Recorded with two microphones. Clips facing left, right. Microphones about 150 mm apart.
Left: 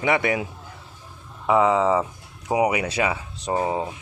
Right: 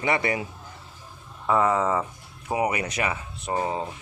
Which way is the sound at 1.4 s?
10° left (ahead or behind).